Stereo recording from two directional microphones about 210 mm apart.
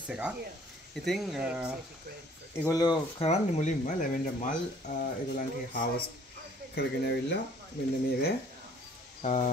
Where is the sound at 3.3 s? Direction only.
35° left (ahead or behind).